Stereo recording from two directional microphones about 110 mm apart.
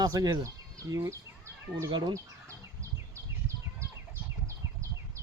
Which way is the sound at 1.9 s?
45° right (ahead or behind).